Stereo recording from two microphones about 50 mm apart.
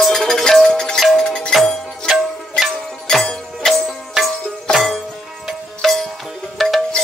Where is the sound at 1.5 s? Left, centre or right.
Centre.